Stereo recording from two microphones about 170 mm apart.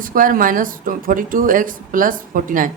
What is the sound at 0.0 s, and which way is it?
A woman's voice, 55° right (ahead or behind).